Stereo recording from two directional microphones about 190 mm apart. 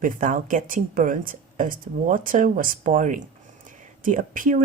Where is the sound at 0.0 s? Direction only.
45° right (ahead or behind).